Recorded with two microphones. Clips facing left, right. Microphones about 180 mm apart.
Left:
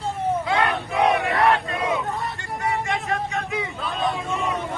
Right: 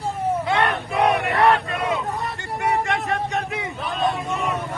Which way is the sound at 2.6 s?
65° right (ahead or behind).